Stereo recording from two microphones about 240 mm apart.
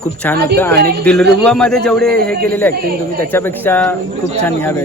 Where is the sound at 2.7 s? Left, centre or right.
Right.